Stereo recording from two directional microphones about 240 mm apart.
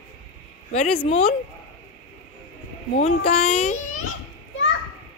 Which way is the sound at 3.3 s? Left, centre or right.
Left.